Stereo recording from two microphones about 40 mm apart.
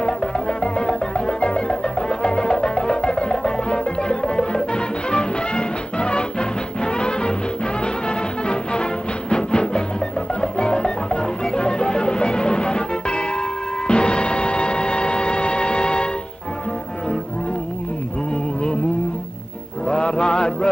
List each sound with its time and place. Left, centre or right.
0.6 s music: left
19.9 s music: left